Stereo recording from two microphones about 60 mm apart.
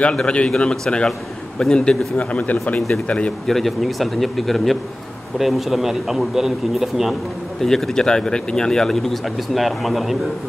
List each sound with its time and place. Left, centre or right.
0.0 s speech: centre
3.4 s a man's voice: centre
7.6 s speech: centre